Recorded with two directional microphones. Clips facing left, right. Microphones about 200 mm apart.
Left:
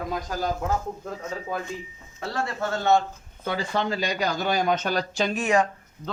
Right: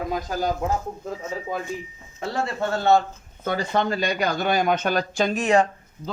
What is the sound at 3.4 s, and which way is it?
Speech, 50° right (ahead or behind).